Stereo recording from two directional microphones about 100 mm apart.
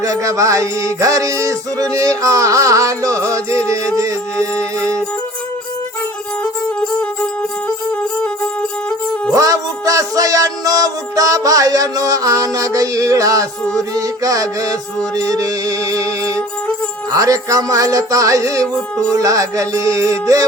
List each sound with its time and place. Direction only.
0.0 s music: 35° right (ahead or behind)
6.4 s music: 15° left (ahead or behind)
9.3 s music: 35° right (ahead or behind)